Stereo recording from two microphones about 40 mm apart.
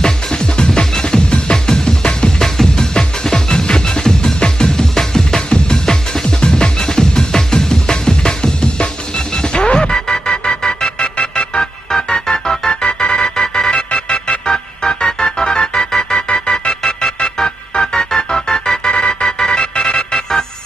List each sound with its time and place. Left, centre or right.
0.0 s music: centre
14.4 s music: centre
19.6 s music: left